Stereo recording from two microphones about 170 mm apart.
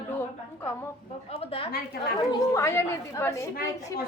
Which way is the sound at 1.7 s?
60° left (ahead or behind).